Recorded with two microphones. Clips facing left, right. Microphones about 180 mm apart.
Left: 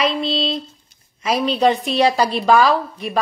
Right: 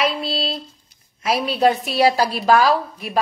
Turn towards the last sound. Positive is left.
turn(degrees=0)  # may be behind; listen again after turning